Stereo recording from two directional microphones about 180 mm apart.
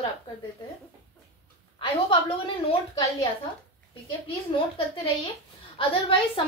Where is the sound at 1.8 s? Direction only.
30° left (ahead or behind).